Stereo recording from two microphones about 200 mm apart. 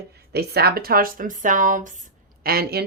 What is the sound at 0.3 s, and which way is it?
Speech, 50° right (ahead or behind).